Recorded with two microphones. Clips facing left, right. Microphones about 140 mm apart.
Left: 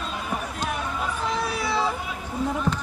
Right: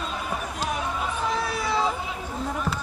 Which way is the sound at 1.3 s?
10° left (ahead or behind).